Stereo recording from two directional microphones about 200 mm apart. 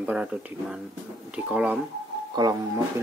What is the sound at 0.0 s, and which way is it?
Speech, 5° right (ahead or behind).